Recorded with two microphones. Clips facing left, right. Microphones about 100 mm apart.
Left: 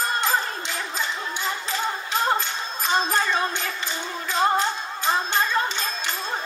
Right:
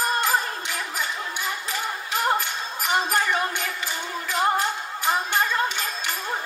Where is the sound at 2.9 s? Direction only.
25° left (ahead or behind).